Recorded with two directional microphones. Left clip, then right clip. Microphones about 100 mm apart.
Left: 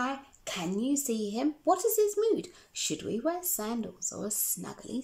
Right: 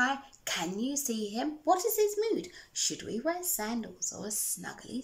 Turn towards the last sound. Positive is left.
turn(degrees=45)  # may be behind; listen again after turning